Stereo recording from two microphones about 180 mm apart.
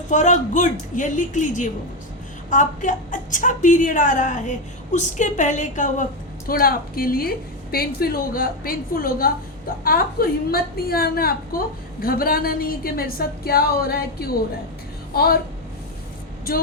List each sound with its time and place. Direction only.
0.1 s a woman's voice: 45° left (ahead or behind); by 15.4 s 60° left (ahead or behind)